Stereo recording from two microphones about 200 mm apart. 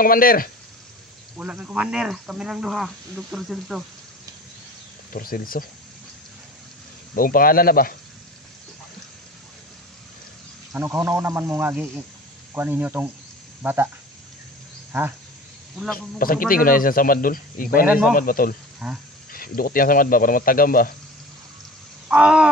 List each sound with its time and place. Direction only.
0.0 s a man's voice: 45° left (ahead or behind)
1.4 s speech: 5° right (ahead or behind)
5.1 s a man's voice: 45° left (ahead or behind)
7.2 s a man's voice: 45° left (ahead or behind)
10.7 s speech: 15° right (ahead or behind)
14.9 s speech: 10° right (ahead or behind)
16.2 s a man's voice: 45° left (ahead or behind)
18.8 s speech: 10° right (ahead or behind)
19.3 s a man's voice: 45° left (ahead or behind)
22.1 s a sound: 5° right (ahead or behind)